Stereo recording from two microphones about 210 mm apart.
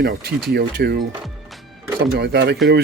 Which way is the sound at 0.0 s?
50° right (ahead or behind).